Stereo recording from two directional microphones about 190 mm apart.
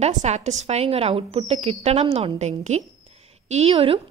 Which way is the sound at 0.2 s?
35° right (ahead or behind).